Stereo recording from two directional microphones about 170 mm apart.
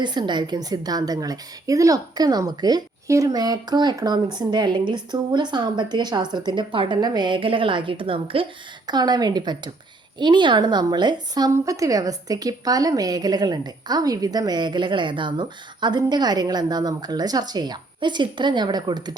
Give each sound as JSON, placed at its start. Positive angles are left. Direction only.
{"t": 0.0, "sound": "a woman's voice", "side_deg": -25}